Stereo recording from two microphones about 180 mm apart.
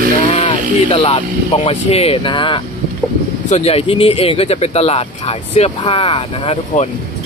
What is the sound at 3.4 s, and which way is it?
Speech, 35° left (ahead or behind).